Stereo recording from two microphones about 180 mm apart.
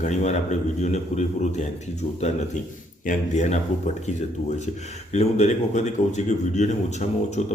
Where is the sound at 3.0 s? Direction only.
40° left (ahead or behind).